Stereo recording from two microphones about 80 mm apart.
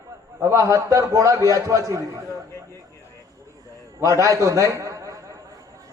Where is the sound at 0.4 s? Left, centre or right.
Right.